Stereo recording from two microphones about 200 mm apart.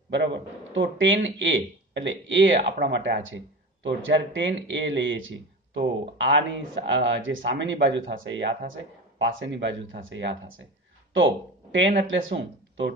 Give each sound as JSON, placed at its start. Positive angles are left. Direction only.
{"t": 0.1, "sound": "speech", "side_deg": -65}